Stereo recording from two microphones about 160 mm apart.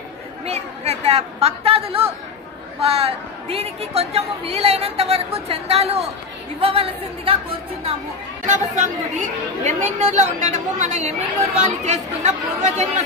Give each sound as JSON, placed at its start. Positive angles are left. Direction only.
{"t": 0.5, "sound": "a woman's voice", "side_deg": -40}
{"t": 8.5, "sound": "a woman's voice", "side_deg": -50}